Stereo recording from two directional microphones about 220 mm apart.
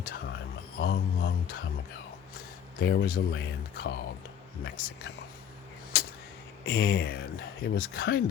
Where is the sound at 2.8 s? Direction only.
50° left (ahead or behind).